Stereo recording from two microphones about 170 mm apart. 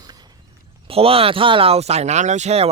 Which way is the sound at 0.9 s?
35° right (ahead or behind).